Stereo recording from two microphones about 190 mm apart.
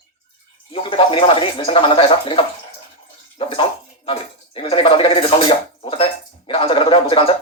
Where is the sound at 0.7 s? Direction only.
30° left (ahead or behind).